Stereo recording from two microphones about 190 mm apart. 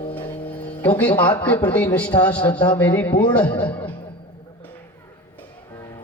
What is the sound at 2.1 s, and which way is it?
Speech, 20° left (ahead or behind).